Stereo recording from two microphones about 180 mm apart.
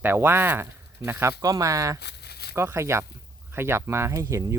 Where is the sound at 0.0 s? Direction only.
10° right (ahead or behind).